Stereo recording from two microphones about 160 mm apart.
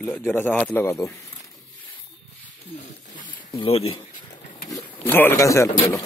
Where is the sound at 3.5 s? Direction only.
35° left (ahead or behind).